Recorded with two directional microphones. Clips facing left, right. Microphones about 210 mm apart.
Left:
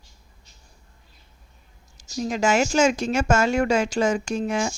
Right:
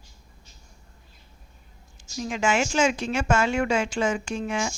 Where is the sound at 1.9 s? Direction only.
40° left (ahead or behind).